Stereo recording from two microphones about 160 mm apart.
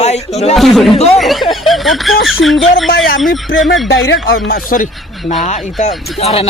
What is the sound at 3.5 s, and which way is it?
Speech, 65° left (ahead or behind).